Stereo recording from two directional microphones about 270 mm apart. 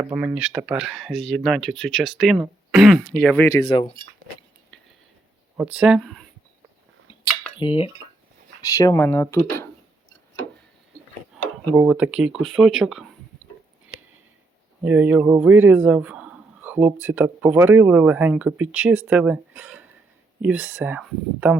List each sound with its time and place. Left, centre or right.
0.0 s speech: centre
4.7 s a sound: centre
5.5 s speech: centre
7.6 s speech: centre
11.7 s speech: centre
14.8 s speech: centre